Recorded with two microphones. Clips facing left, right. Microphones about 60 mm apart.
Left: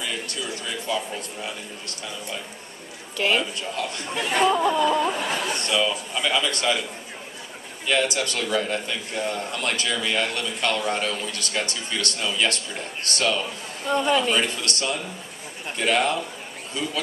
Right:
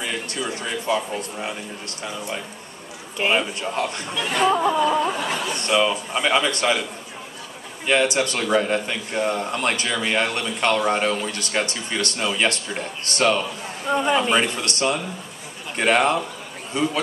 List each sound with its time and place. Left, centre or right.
0.0 s a man's voice: right
3.2 s a man's voice: right
4.4 s speech: centre
5.3 s a man's voice: right
7.8 s a man's voice: right
13.8 s a man's voice: centre